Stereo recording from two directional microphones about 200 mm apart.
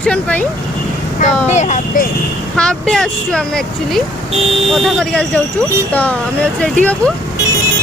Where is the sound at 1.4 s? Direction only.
35° left (ahead or behind).